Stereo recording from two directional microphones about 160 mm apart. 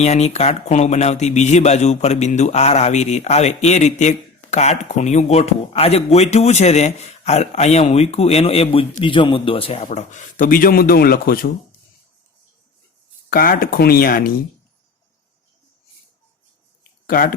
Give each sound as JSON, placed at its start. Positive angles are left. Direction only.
{"t": 0.0, "sound": "speech", "side_deg": 45}
{"t": 13.3, "sound": "speech", "side_deg": 65}
{"t": 17.1, "sound": "speech", "side_deg": 60}